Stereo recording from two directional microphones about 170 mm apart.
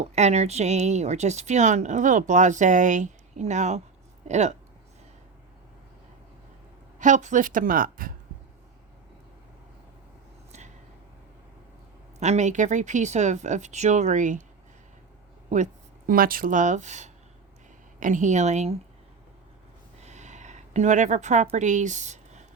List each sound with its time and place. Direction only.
0.0 s speech: 40° right (ahead or behind)
7.0 s speech: 45° right (ahead or behind)
12.2 s speech: 40° right (ahead or behind)
15.4 s speech: 45° right (ahead or behind)
20.0 s a sound: 40° right (ahead or behind)